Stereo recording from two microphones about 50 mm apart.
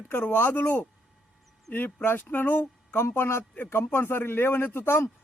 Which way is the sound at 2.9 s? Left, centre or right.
Left.